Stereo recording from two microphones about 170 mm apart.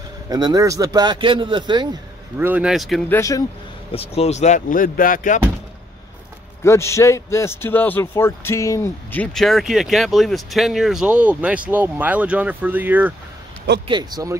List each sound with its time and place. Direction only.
0.3 s speech: 25° right (ahead or behind)
2.3 s a man's voice: 10° right (ahead or behind)
3.1 s speech: 20° left (ahead or behind)
3.9 s speech: 35° left (ahead or behind); by 5.4 s 50° left (ahead or behind)
6.6 s a man's voice: 15° left (ahead or behind); by 13.1 s 10° right (ahead or behind)
13.8 s speech: 25° right (ahead or behind)